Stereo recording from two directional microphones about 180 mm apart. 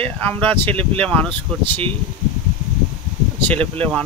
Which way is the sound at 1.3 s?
25° right (ahead or behind).